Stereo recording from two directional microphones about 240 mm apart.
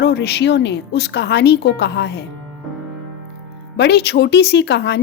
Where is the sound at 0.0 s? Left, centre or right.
Left.